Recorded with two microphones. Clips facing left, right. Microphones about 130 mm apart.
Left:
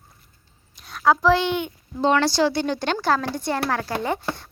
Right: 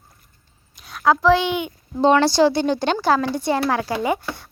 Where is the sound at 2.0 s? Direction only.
20° right (ahead or behind).